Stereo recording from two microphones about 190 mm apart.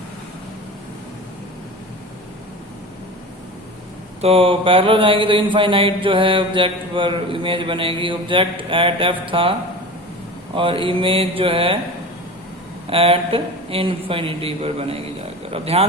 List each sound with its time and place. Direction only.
4.2 s mantra: 30° right (ahead or behind)
12.9 s mantra: 30° right (ahead or behind)
15.4 s speech: 30° right (ahead or behind)